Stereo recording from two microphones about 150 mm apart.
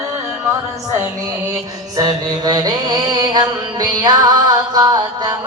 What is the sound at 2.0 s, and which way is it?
Mantra, 25° right (ahead or behind).